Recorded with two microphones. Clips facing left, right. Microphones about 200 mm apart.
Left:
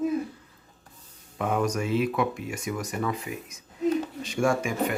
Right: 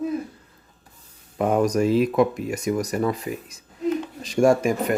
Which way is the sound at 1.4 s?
40° right (ahead or behind).